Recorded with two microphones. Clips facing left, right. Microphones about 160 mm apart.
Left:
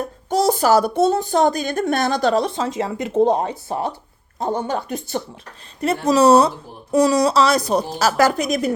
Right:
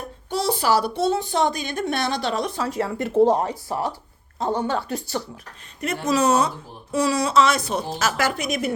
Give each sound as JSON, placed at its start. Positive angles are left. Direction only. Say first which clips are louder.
{"t": 0.3, "sound": "a woman's voice", "louder": "left 5 dB", "side_deg": 45}
{"t": 2.6, "sound": "speech", "louder": "left 2 dB", "side_deg": 20}
{"t": 5.8, "sound": "a woman's voice", "louder": "left 6 dB", "side_deg": 35}